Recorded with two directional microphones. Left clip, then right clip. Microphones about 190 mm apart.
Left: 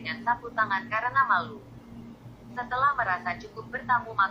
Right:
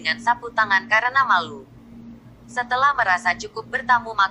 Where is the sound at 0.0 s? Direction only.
45° right (ahead or behind).